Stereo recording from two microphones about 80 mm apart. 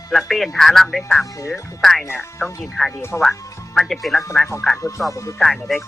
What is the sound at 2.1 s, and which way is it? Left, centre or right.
Speech, left.